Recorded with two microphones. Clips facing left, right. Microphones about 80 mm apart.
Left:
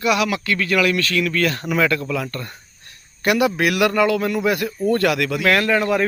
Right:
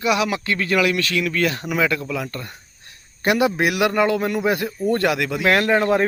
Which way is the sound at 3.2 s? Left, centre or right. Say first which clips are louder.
Left 1 dB; right.